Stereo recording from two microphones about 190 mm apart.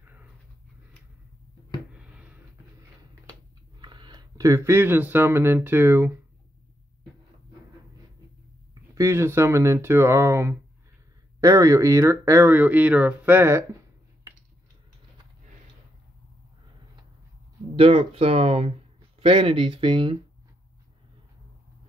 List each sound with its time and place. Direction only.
3.8 s speech: 25° right (ahead or behind)
8.9 s speech: 15° right (ahead or behind)
17.7 s speech: 30° right (ahead or behind)